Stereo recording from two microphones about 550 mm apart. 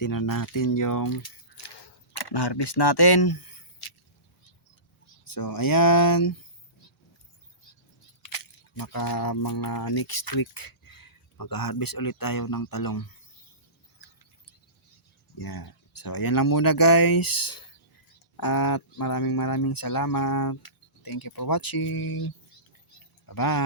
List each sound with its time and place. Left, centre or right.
0.0 s speech: left
1.6 s camera: left
5.2 s speech: left
8.3 s speech: left
15.4 s speech: left